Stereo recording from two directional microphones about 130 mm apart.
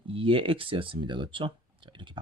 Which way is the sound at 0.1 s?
45° right (ahead or behind).